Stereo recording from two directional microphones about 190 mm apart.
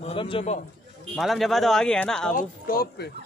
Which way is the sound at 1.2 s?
Centre (ahead or behind).